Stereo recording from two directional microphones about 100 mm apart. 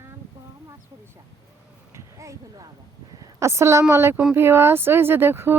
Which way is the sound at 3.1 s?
35° right (ahead or behind).